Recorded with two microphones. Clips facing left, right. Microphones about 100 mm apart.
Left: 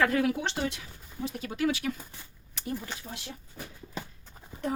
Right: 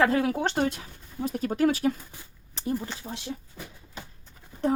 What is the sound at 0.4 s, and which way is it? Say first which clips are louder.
Speech: right 6 dB; 45° right (ahead or behind).